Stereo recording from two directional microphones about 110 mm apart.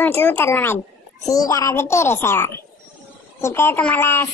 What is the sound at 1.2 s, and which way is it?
A woman's voice, 30° left (ahead or behind).